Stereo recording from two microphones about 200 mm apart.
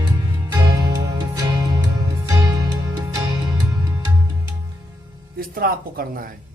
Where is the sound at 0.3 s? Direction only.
15° right (ahead or behind).